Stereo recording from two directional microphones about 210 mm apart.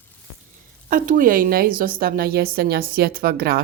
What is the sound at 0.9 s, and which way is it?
A woman's voice, 40° right (ahead or behind).